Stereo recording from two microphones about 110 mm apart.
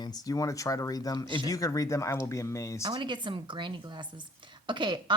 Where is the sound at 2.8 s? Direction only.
40° right (ahead or behind).